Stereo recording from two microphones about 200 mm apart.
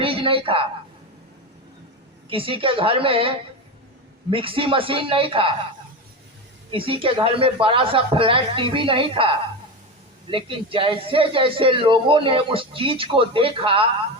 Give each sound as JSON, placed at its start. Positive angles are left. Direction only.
{"t": 0.0, "sound": "a woman's voice", "side_deg": -25}
{"t": 2.3, "sound": "a man's voice", "side_deg": -25}
{"t": 6.7, "sound": "a man's voice", "side_deg": -25}